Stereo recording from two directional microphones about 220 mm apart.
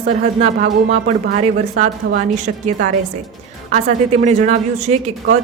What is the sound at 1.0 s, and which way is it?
Speech, 45° right (ahead or behind).